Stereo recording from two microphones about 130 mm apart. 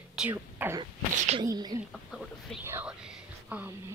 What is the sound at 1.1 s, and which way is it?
Speech, 60° right (ahead or behind).